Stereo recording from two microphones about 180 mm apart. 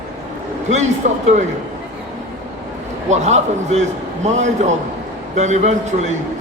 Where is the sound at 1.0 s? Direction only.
40° right (ahead or behind).